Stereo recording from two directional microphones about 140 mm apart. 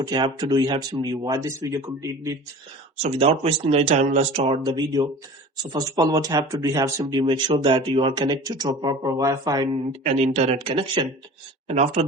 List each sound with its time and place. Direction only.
0.0 s speech: 30° right (ahead or behind)
3.0 s speech: 45° right (ahead or behind); by 9.6 s 25° right (ahead or behind)
9.9 s speech: 50° right (ahead or behind)
11.7 s speech: 50° right (ahead or behind)